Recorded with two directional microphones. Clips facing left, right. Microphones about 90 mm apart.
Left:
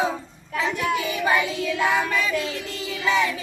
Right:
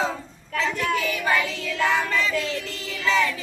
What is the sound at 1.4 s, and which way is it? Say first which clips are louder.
Child singing: left 1 dB; 15° left (ahead or behind).